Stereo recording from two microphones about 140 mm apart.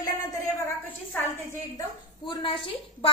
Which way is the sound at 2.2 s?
35° left (ahead or behind).